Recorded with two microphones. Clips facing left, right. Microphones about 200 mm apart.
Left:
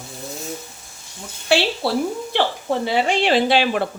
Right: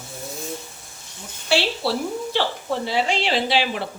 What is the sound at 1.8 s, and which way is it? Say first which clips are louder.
Speech: left 2 dB; 55° left (ahead or behind).